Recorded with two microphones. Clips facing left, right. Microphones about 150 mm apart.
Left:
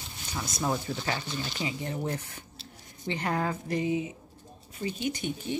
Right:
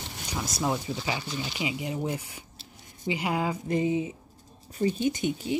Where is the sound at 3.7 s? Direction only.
25° right (ahead or behind).